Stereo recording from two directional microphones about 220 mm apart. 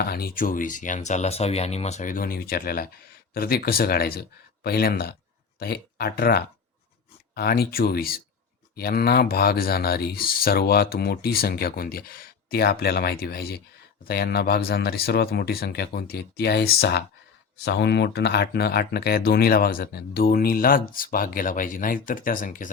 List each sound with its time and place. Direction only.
0.0 s speech: 45° left (ahead or behind)